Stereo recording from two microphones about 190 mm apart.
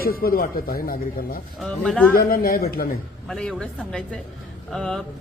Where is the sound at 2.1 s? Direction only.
50° left (ahead or behind).